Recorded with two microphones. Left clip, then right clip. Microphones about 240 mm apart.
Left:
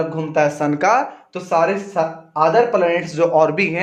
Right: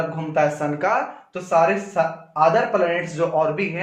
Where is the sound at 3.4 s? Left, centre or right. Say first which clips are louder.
Left 5 dB; left.